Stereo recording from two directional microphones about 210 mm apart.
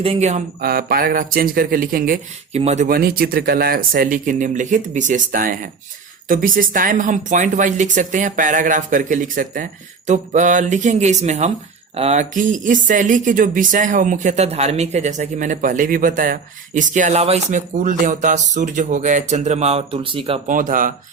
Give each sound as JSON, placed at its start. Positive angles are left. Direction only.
{"t": 0.0, "sound": "speech", "side_deg": -30}
{"t": 0.6, "sound": "a man's voice", "side_deg": -45}
{"t": 20.5, "sound": "speech", "side_deg": -40}